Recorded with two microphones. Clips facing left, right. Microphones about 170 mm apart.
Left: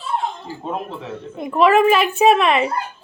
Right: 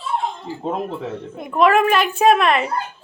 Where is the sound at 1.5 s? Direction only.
Centre (ahead or behind).